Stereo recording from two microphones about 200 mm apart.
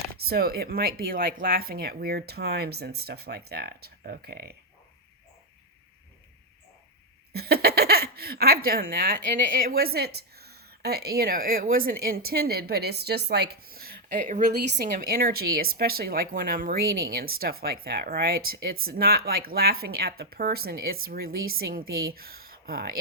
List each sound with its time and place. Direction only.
0.3 s speech: 50° right (ahead or behind)
7.3 s a woman's voice: 50° right (ahead or behind)